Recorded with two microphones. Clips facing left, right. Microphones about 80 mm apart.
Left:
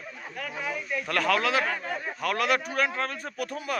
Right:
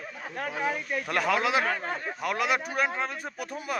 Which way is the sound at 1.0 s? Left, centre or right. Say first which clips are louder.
Left 1 dB; centre.